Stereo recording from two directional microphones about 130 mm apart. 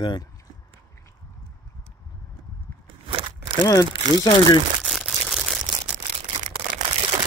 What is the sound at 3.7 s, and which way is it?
Speech, 30° left (ahead or behind).